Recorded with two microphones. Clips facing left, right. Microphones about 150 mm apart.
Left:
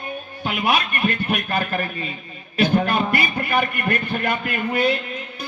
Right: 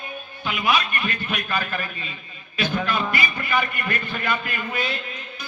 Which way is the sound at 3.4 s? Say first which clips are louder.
Left 3 dB; 55° left (ahead or behind).